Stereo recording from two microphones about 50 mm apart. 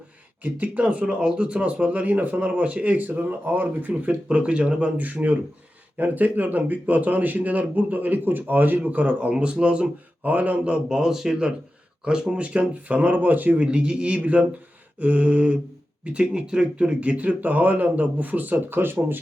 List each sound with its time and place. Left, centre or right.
0.4 s speech: right
4.1 s speech: right
4.9 s speech: right
10.2 s speech: right
10.6 s a man's voice: centre; by 13.7 s right
13.7 s speech: centre; by 18.9 s right